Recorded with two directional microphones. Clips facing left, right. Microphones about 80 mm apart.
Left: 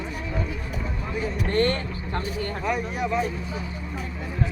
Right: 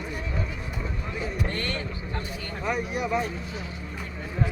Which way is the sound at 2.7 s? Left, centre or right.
Centre.